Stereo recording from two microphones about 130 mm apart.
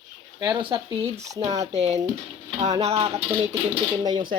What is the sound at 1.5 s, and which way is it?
Speech, 60° right (ahead or behind).